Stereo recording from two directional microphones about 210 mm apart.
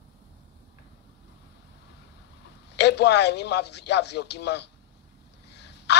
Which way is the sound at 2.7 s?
55° left (ahead or behind).